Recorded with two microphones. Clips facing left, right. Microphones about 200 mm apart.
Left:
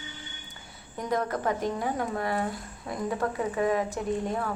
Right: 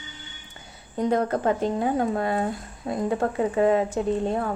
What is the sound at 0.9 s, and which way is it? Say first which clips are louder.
Speech: right 6 dB; 30° right (ahead or behind).